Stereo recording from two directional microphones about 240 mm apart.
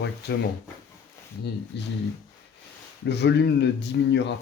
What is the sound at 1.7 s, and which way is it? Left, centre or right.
Speech, left.